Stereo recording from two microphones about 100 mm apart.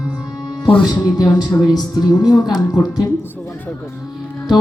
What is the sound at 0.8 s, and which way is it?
A woman's voice, 45° left (ahead or behind).